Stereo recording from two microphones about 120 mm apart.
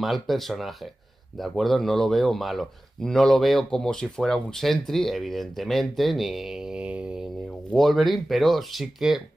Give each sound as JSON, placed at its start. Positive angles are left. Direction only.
{"t": 0.0, "sound": "speech", "side_deg": 0}
{"t": 7.7, "sound": "speech", "side_deg": 0}